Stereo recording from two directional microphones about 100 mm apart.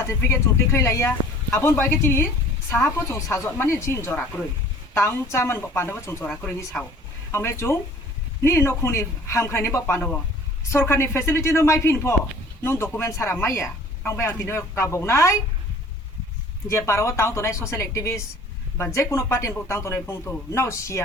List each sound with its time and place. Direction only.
0.0 s a woman's voice: 25° left (ahead or behind)
6.7 s speech: 10° left (ahead or behind)
7.3 s a woman's voice: 25° left (ahead or behind)
16.6 s a woman's voice: 30° left (ahead or behind)